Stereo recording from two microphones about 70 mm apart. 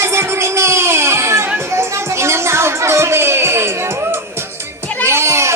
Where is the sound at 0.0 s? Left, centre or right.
Right.